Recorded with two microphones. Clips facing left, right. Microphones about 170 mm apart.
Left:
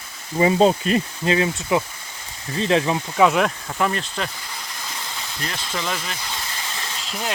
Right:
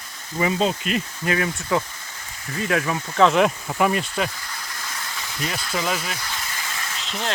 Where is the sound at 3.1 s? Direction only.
5° left (ahead or behind).